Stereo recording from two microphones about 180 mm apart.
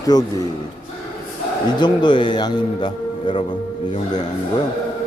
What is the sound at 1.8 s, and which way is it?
A man's voice, 25° left (ahead or behind).